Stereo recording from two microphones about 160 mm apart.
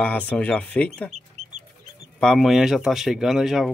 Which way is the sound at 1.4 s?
40° right (ahead or behind).